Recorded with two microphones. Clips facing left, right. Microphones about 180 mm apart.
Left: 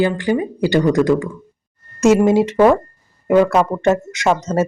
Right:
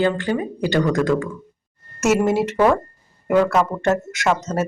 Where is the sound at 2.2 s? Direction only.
15° left (ahead or behind).